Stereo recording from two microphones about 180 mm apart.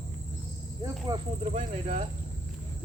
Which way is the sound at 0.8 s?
25° right (ahead or behind).